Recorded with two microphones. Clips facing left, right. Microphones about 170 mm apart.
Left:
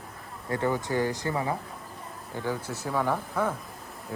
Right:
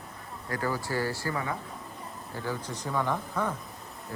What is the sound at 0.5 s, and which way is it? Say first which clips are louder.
Speech: left 4 dB; 25° left (ahead or behind).